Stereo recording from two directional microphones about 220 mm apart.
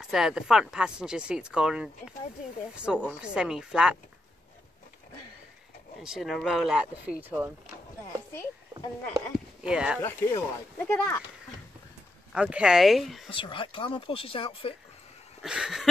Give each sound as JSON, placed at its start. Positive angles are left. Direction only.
{"t": 0.0, "sound": "speech", "side_deg": 0}
{"t": 6.0, "sound": "speech", "side_deg": 0}
{"t": 9.1, "sound": "speech", "side_deg": -5}
{"t": 10.0, "sound": "speech", "side_deg": 10}
{"t": 12.3, "sound": "speech", "side_deg": -5}
{"t": 13.3, "sound": "speech", "side_deg": 25}
{"t": 15.4, "sound": "speech", "side_deg": -5}